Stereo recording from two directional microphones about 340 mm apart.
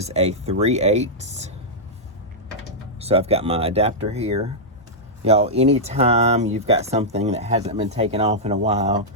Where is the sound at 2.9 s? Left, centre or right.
Centre.